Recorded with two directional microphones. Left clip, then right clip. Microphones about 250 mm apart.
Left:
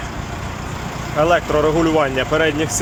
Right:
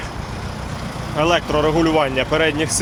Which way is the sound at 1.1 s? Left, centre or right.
Centre.